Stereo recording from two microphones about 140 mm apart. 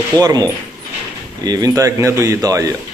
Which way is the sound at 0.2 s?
25° right (ahead or behind).